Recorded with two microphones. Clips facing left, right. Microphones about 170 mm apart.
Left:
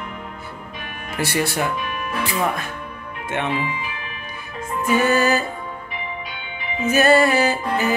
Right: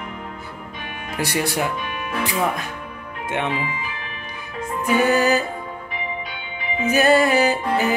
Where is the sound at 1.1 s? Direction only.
15° right (ahead or behind).